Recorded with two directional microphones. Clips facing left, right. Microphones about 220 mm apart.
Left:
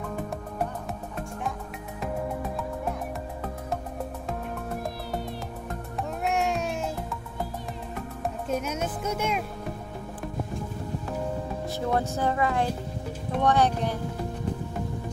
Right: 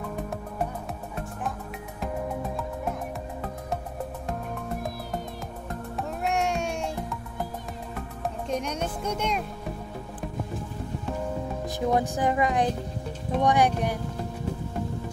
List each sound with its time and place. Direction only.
2.5 s music: centre (ahead or behind)
5.9 s music: centre (ahead or behind)
8.5 s speech: 5° left (ahead or behind)
11.6 s speech: 15° right (ahead or behind)